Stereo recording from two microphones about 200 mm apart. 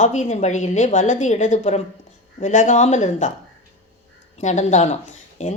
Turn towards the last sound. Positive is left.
turn(degrees=35)  # may be behind; listen again after turning